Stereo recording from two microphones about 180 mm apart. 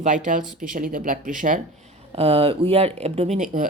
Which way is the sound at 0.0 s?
45° right (ahead or behind).